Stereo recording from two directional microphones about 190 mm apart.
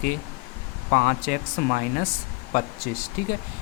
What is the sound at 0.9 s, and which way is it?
Speech, 50° left (ahead or behind).